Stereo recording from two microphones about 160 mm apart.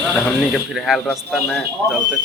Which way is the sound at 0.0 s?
Centre (ahead or behind).